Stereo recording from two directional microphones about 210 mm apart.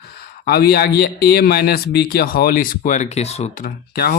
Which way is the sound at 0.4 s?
45° left (ahead or behind).